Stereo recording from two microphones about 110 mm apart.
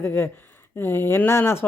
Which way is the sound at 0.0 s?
20° left (ahead or behind).